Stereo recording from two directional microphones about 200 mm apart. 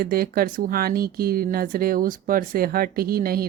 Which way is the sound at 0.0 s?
50° right (ahead or behind).